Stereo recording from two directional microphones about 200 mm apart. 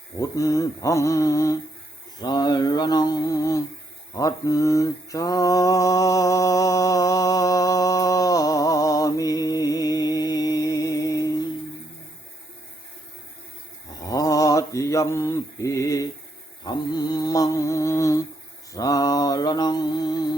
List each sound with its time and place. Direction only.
0.2 s male singing: 15° left (ahead or behind)
2.1 s a sound: 20° left (ahead or behind)
4.1 s mantra: 15° left (ahead or behind)
14.0 s mantra: 15° left (ahead or behind)
16.6 s a sound: 20° left (ahead or behind)
18.7 s mantra: 15° left (ahead or behind)